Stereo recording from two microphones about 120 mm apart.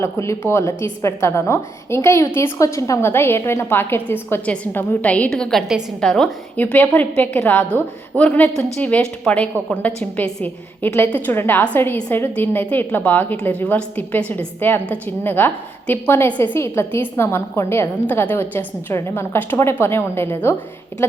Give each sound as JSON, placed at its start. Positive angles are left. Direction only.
{"t": 0.0, "sound": "a woman's voice", "side_deg": 20}
{"t": 6.6, "sound": "a woman's voice", "side_deg": 15}